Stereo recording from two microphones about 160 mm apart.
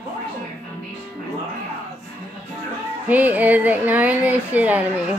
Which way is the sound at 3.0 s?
10° right (ahead or behind).